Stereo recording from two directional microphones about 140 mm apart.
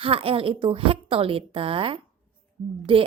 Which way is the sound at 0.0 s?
40° right (ahead or behind).